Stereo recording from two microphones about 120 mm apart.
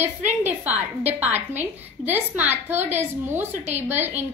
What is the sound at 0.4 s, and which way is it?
A woman's voice, 15° right (ahead or behind).